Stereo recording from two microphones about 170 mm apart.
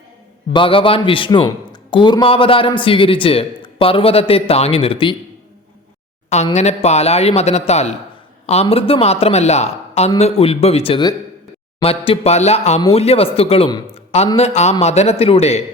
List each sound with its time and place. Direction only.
0.5 s a man's voice: 30° left (ahead or behind)
6.3 s a man's voice: 40° left (ahead or behind)
13.9 s a sound: 40° left (ahead or behind)
14.3 s a man's voice: 40° left (ahead or behind)